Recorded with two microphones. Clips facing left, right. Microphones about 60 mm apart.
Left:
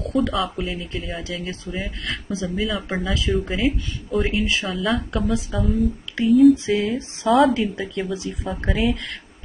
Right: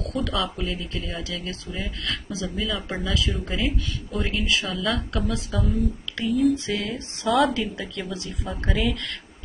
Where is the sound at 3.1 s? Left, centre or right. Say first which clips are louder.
Left 3 dB; left.